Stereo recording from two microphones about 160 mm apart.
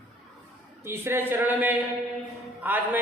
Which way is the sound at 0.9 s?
15° right (ahead or behind).